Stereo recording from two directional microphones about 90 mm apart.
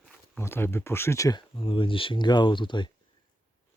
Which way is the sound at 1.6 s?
75° left (ahead or behind).